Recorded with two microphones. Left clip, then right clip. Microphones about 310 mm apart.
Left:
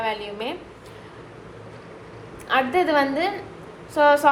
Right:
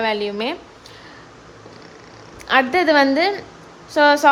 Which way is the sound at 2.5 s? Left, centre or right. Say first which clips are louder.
Right 5 dB; right.